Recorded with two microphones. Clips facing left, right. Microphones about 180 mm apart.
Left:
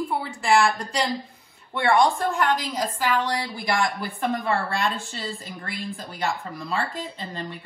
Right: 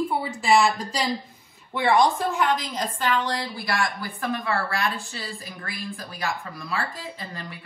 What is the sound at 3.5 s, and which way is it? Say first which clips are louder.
A woman's voice: left 2 dB; 20° left (ahead or behind).